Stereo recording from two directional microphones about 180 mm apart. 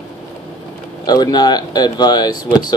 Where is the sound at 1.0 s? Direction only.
20° left (ahead or behind).